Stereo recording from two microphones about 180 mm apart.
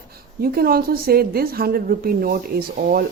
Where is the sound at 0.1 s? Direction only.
60° right (ahead or behind).